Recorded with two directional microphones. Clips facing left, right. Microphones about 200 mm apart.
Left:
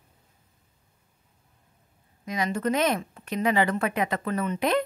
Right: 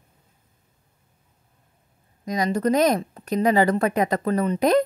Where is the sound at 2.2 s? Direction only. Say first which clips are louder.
Right 5 dB; 40° right (ahead or behind).